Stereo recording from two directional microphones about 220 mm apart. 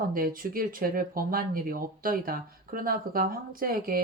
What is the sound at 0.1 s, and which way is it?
Speech, 40° right (ahead or behind).